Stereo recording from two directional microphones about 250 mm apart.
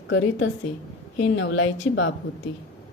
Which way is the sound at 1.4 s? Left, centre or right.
Left.